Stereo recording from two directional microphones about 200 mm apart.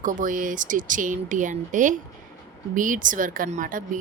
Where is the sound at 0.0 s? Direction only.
40° right (ahead or behind).